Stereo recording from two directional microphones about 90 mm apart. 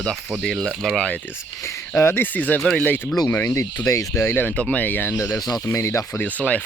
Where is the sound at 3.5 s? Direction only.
35° left (ahead or behind).